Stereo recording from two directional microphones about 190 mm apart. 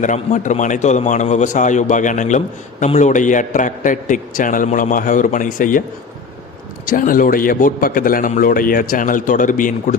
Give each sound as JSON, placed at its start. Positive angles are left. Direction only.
{"t": 0.0, "sound": "a man's voice", "side_deg": 40}
{"t": 6.8, "sound": "a man's voice", "side_deg": 45}